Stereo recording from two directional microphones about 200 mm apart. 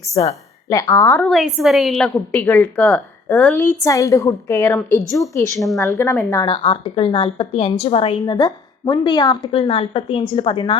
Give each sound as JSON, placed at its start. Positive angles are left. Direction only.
{"t": 0.2, "sound": "a woman's voice", "side_deg": 25}
{"t": 1.2, "sound": "a woman's voice", "side_deg": 0}
{"t": 5.5, "sound": "a woman's voice", "side_deg": 0}
{"t": 5.8, "sound": "a woman's voice", "side_deg": 15}
{"t": 6.5, "sound": "a woman's voice", "side_deg": 25}